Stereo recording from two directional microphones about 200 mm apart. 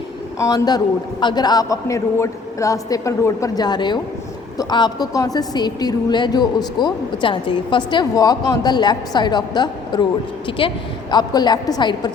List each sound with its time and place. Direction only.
0.3 s a woman's voice: 15° left (ahead or behind)